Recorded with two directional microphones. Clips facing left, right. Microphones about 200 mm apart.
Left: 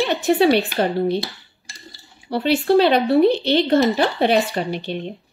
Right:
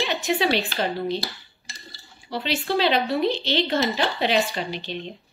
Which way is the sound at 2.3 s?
55° left (ahead or behind).